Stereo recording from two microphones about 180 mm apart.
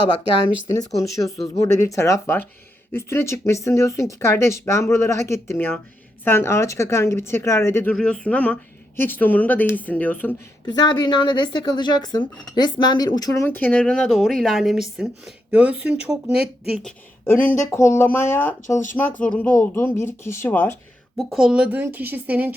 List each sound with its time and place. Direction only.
0.7 s speech: 20° left (ahead or behind)
10.7 s speech: 25° left (ahead or behind); by 16.9 s 5° right (ahead or behind)
17.7 s speech: 15° left (ahead or behind)
21.2 s speech: centre (ahead or behind)